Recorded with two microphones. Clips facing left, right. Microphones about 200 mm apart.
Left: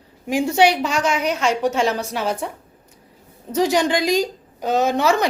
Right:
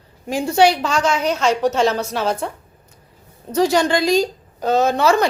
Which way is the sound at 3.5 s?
15° left (ahead or behind).